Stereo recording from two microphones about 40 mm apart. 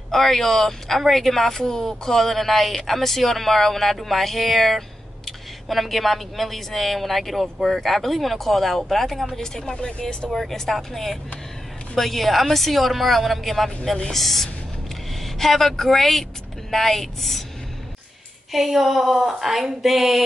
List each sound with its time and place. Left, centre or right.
0.1 s speech: centre
9.4 s speech: centre
10.3 s a woman's voice: centre
18.5 s speech: centre